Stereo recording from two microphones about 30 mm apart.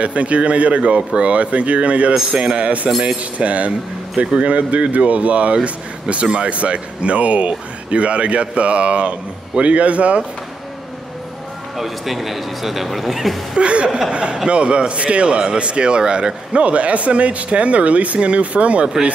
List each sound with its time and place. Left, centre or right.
0.0 s speech: right
11.7 s speech: centre
13.6 s a man's voice: right
16.6 s speech: right